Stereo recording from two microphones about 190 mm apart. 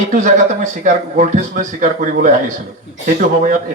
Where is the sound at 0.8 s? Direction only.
40° right (ahead or behind).